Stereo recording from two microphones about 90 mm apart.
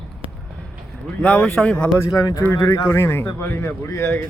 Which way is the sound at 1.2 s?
15° left (ahead or behind).